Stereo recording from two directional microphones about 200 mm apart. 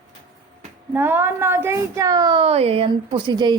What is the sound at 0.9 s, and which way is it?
A woman's voice, 10° right (ahead or behind).